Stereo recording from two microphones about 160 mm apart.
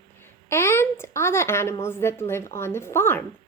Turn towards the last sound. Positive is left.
turn(degrees=15)  # may be behind; listen again after turning